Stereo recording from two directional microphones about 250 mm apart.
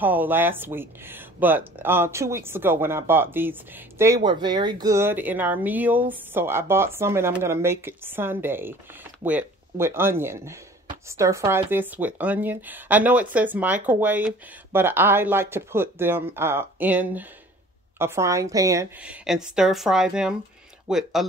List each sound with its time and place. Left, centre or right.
0.0 s a woman's voice: centre